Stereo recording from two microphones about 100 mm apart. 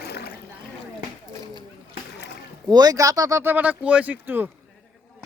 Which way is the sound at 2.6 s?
40° right (ahead or behind).